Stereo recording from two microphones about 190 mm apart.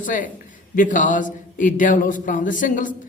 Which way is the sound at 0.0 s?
45° left (ahead or behind).